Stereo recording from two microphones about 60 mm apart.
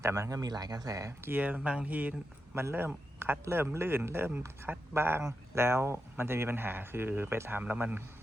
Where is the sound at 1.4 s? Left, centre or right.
Right.